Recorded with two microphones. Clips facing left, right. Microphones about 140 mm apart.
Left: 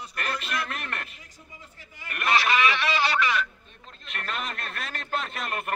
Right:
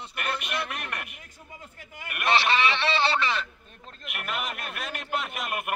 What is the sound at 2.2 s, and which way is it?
A man's voice, 30° right (ahead or behind).